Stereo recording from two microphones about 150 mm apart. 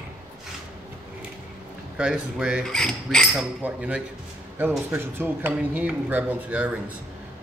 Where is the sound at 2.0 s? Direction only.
5° right (ahead or behind).